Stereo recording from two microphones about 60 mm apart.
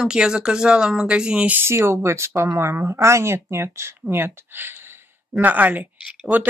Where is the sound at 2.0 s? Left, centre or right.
Right.